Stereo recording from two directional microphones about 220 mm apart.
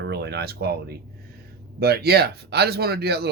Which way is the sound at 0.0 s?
50° right (ahead or behind).